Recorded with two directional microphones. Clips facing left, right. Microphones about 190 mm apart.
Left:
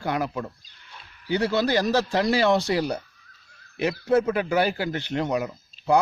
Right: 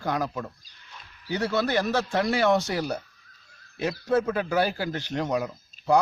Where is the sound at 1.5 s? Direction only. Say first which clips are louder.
Left 2 dB; 35° left (ahead or behind).